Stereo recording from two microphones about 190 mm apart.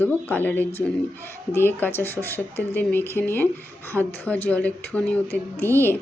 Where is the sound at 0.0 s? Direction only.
10° left (ahead or behind).